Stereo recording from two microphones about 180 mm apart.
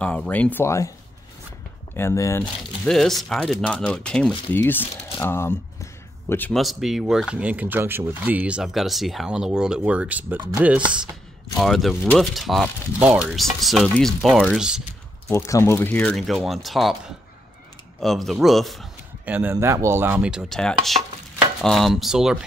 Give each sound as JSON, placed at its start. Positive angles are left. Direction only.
{"t": 0.0, "sound": "speech", "side_deg": 5}
{"t": 2.0, "sound": "speech", "side_deg": 15}
{"t": 2.8, "sound": "speech", "side_deg": 0}
{"t": 5.2, "sound": "a sound", "side_deg": 15}
{"t": 6.6, "sound": "speech", "side_deg": 0}
{"t": 15.2, "sound": "speech", "side_deg": 15}
{"t": 18.0, "sound": "speech", "side_deg": 0}